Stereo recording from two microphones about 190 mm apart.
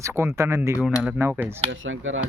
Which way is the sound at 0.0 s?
15° right (ahead or behind).